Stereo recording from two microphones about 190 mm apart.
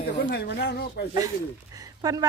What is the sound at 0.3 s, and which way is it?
Speech, 60° left (ahead or behind).